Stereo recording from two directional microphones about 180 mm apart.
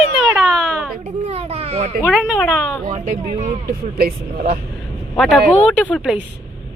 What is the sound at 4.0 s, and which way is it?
Speech, 55° right (ahead or behind).